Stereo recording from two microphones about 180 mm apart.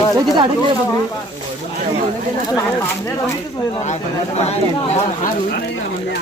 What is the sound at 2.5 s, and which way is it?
Speech, 15° left (ahead or behind).